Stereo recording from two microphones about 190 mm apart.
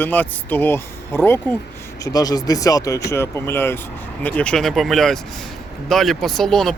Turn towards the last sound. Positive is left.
turn(degrees=0)  # may be behind; listen again after turning